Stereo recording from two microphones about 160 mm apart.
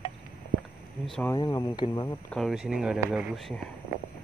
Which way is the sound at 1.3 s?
20° left (ahead or behind).